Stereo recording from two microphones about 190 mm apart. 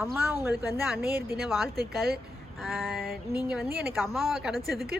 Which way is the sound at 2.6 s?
Centre (ahead or behind).